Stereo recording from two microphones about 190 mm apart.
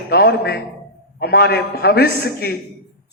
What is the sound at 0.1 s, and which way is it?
A man's voice, 60° left (ahead or behind).